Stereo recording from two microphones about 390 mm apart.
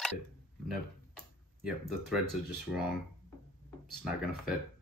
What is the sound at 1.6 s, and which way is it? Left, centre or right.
Speech, centre.